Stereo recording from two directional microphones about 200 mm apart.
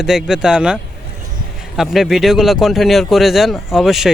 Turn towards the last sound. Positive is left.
turn(degrees=0)  # may be behind; listen again after turning